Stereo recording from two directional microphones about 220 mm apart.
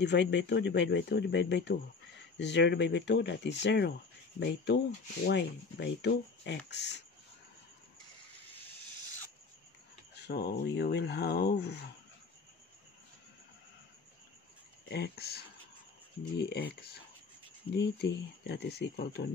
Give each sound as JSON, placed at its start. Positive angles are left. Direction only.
{"t": 0.0, "sound": "speech", "side_deg": 50}
{"t": 10.1, "sound": "a sound", "side_deg": 50}
{"t": 10.6, "sound": "speech", "side_deg": 50}
{"t": 14.9, "sound": "speech", "side_deg": 45}